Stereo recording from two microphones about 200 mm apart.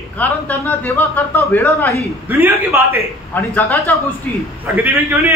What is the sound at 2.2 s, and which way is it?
Speech, 10° right (ahead or behind).